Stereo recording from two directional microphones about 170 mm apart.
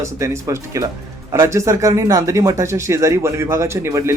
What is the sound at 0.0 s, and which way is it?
Speech, 15° right (ahead or behind).